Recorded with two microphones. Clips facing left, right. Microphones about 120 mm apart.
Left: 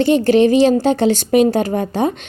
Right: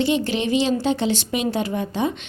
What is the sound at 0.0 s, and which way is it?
A woman's voice, 45° left (ahead or behind).